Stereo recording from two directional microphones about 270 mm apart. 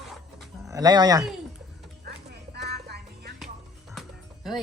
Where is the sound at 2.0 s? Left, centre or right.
Right.